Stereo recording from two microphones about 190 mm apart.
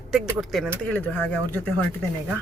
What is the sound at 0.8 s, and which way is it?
Speech, 10° left (ahead or behind).